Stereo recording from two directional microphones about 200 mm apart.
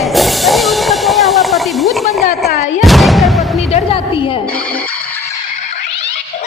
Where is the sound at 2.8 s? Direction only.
Centre (ahead or behind).